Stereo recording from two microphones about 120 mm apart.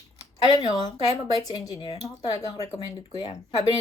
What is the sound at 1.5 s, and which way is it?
Speech, 35° left (ahead or behind).